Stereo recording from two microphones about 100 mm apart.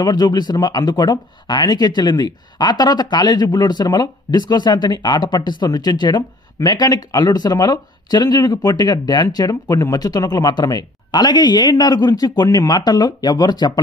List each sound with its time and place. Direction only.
0.0 s speech: 40° left (ahead or behind)